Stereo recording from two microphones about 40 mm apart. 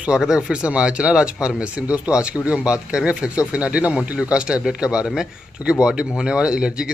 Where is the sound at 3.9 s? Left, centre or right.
Centre.